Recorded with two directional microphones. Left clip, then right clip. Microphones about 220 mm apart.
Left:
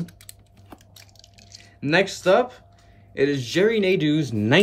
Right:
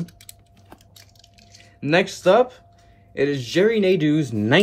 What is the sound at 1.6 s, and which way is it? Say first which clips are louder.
Speech: right 1 dB; centre (ahead or behind).